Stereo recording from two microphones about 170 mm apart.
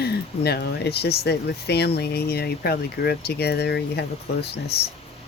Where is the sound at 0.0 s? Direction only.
70° left (ahead or behind).